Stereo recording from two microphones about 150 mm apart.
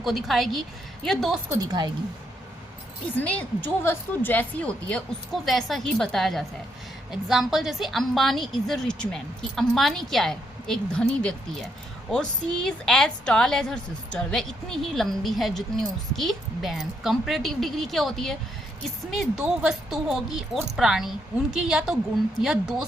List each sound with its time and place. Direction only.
0.0 s a woman's voice: centre (ahead or behind)
1.5 s a woman's voice: 25° right (ahead or behind)
3.2 s a woman's voice: 10° left (ahead or behind)